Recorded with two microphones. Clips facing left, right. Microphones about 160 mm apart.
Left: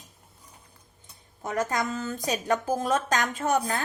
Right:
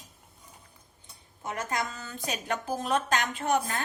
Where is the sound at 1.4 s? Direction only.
45° left (ahead or behind).